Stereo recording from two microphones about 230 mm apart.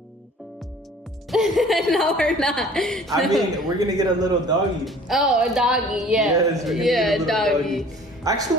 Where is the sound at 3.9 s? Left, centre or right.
Centre.